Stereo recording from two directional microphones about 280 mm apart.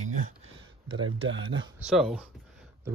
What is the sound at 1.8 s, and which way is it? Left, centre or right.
Speech, centre.